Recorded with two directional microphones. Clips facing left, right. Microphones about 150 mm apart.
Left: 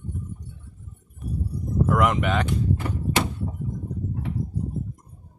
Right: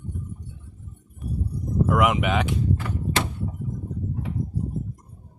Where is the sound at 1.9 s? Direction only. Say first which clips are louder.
Even; 5° right (ahead or behind).